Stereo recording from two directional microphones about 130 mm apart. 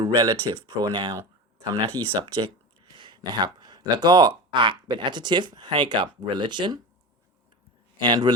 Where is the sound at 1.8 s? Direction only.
45° right (ahead or behind).